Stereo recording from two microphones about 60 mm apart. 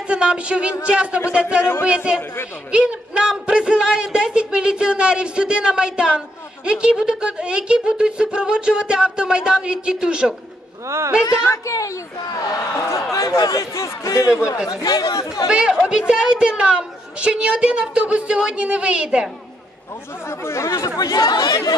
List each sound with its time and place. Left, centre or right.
0.1 s a woman's voice: centre
2.7 s a man's voice: centre
11.4 s speech: left
13.1 s speech: left
14.7 s speech: left
15.4 s a woman's voice: centre
20.2 s speech: left
21.0 s speech: left